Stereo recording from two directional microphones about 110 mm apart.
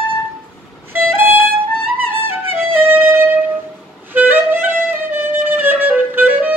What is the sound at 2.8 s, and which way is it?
Music, 20° right (ahead or behind).